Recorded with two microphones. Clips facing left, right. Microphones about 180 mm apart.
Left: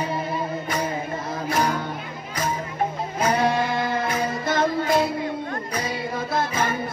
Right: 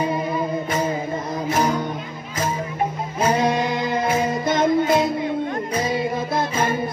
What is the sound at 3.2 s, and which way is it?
Music, 20° right (ahead or behind).